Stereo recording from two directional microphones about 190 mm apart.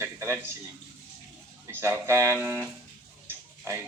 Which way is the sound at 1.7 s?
15° right (ahead or behind).